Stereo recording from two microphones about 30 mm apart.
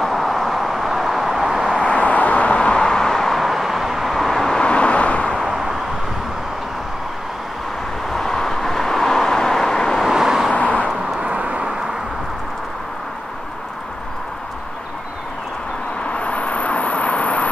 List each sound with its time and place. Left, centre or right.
0.0 s vehicle: centre
1.8 s a sound: left; by 3.3 s centre
3.3 s vehicle: centre
4.6 s vehicle: left
5.4 s vehicle: centre
8.1 s vehicle: centre
10.0 s vehicle: centre
10.5 s vehicle: left
11.3 s vehicle: right
16.1 s vehicle: left